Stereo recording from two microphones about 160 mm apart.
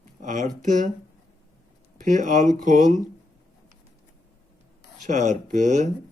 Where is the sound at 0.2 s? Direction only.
50° right (ahead or behind).